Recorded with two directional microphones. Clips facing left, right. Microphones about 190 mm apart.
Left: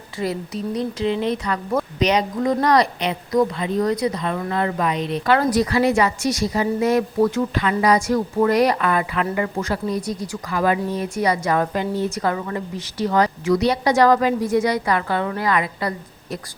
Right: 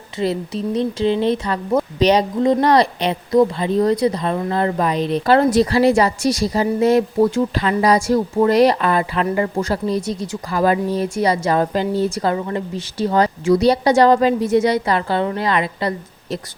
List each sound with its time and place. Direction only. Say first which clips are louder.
0.2 s speech: right 4 dB; 25° right (ahead or behind)